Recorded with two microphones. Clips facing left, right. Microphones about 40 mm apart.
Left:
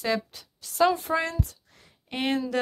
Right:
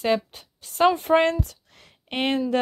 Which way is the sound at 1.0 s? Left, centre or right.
Right.